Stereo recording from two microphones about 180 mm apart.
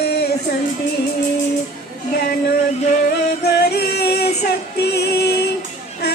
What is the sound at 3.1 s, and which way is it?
Music, 65° left (ahead or behind).